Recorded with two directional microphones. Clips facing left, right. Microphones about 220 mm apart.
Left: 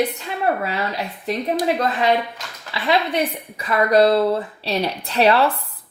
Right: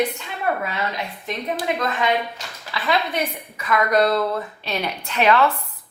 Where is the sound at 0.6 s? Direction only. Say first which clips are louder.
Left 2 dB; 35° left (ahead or behind).